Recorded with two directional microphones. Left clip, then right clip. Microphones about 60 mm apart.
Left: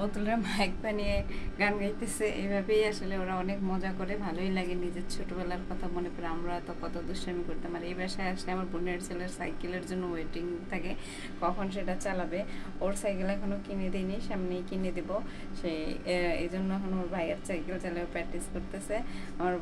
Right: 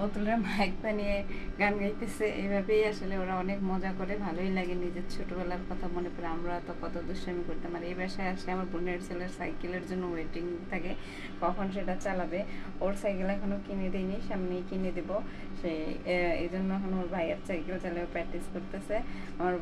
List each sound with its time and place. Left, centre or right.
0.0 s a woman's voice: centre